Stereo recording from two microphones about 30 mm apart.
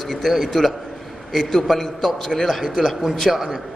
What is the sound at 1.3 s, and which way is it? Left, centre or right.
A man's voice, centre.